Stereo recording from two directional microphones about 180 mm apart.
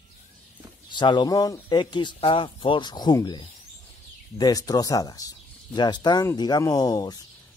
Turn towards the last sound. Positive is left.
turn(degrees=20)  # may be behind; listen again after turning